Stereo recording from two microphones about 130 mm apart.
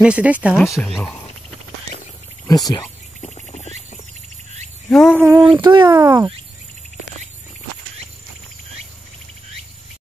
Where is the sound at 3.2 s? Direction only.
60° left (ahead or behind).